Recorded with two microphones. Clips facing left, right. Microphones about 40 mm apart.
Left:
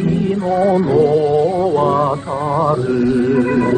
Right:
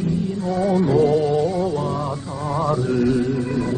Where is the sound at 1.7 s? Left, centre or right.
Left.